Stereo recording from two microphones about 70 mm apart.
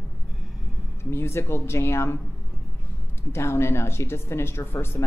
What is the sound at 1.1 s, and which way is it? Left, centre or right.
Speech, left.